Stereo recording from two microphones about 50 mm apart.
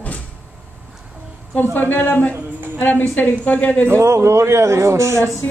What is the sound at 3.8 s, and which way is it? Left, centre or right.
A man's voice, right.